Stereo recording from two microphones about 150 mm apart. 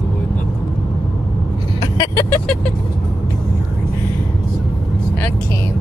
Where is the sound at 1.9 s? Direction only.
25° left (ahead or behind).